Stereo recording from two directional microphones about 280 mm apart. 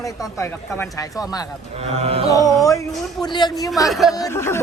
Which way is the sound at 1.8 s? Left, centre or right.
Right.